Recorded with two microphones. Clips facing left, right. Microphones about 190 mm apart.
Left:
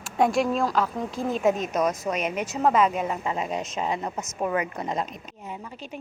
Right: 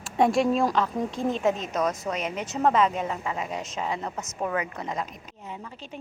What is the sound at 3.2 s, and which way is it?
Speech, 25° left (ahead or behind).